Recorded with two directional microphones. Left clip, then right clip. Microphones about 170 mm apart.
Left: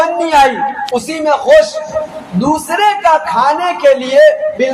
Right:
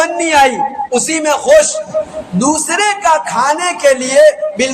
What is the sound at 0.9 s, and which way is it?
A man's voice, 25° right (ahead or behind).